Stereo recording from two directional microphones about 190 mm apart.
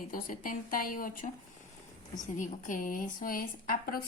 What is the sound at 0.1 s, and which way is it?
A woman's voice, 45° left (ahead or behind).